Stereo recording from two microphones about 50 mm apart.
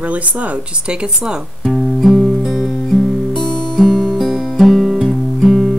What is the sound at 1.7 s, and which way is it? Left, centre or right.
Guitar, centre.